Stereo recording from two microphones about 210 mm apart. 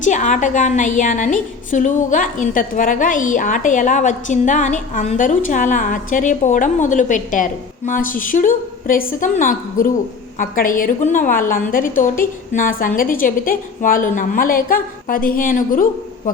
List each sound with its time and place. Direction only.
0.0 s a woman's voice: 35° left (ahead or behind)